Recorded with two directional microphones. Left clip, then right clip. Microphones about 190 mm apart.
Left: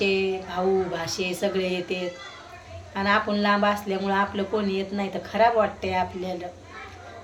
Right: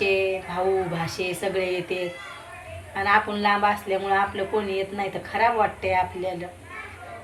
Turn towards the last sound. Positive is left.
turn(degrees=15)  # may be behind; listen again after turning